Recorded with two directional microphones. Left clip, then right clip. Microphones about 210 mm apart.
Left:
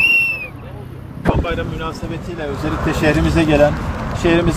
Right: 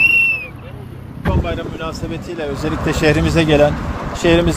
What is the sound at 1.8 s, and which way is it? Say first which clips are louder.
Speech: even; 45° right (ahead or behind).